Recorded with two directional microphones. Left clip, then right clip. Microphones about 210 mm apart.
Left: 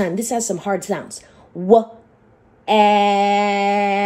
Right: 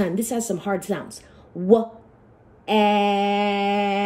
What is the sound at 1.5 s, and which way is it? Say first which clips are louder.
Speech: left 2 dB; 10° left (ahead or behind).